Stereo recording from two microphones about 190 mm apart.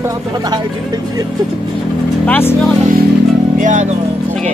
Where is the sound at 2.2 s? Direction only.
10° left (ahead or behind).